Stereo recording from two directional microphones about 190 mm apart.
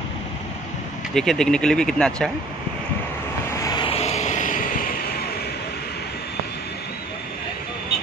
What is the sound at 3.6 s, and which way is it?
Vehicle, 20° left (ahead or behind).